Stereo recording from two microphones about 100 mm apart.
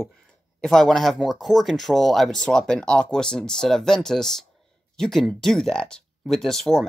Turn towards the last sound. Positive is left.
turn(degrees=5)  # may be behind; listen again after turning